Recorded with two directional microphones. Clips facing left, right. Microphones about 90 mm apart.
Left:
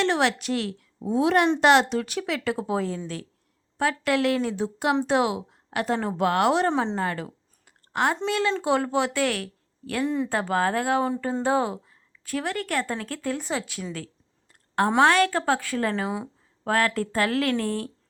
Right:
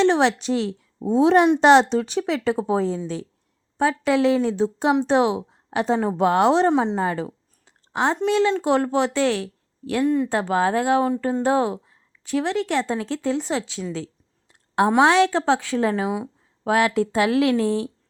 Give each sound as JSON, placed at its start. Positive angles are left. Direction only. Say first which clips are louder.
{"t": 0.0, "sound": "speech", "louder": "right 5 dB", "side_deg": -25}
{"t": 6.7, "sound": "a woman's voice", "louder": "right 5 dB", "side_deg": -10}
{"t": 9.9, "sound": "speech", "louder": "right 5 dB", "side_deg": 0}
{"t": 10.2, "sound": "a woman's voice", "louder": "right 3 dB", "side_deg": -15}
{"t": 11.0, "sound": "speech", "louder": "right 4 dB", "side_deg": -5}
{"t": 11.4, "sound": "a woman's voice", "louder": "right 2 dB", "side_deg": -15}
{"t": 14.8, "sound": "speech", "louder": "right 3 dB", "side_deg": -5}
{"t": 15.4, "sound": "a woman's voice", "louder": "right 4 dB", "side_deg": -15}